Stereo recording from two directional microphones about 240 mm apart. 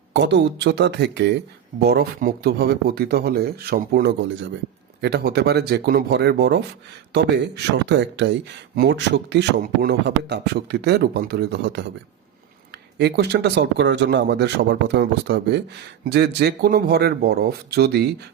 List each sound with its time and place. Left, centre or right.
0.1 s speech: right
13.0 s speech: right